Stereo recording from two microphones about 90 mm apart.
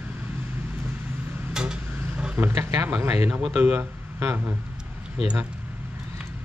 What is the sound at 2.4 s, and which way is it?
Speech, 30° right (ahead or behind).